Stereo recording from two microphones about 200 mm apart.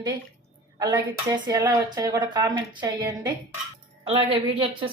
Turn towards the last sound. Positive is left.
turn(degrees=-25)  # may be behind; listen again after turning